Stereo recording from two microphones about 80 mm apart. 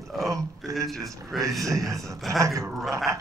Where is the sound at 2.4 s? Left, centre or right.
Right.